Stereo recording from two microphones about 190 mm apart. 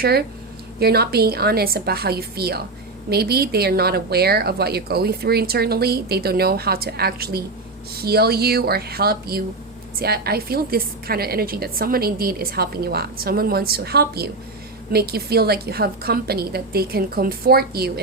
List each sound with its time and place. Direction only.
0.0 s a woman's voice: 55° right (ahead or behind)